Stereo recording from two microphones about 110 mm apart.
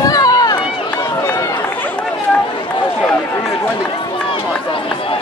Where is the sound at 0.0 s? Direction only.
35° left (ahead or behind).